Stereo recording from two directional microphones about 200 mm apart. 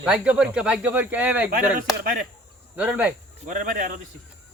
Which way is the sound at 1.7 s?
45° right (ahead or behind).